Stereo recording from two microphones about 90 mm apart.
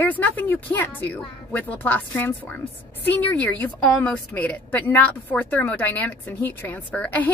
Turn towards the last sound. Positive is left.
turn(degrees=15)  # may be behind; listen again after turning